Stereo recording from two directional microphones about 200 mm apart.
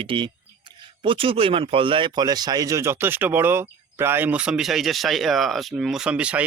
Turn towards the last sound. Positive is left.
turn(degrees=-5)  # may be behind; listen again after turning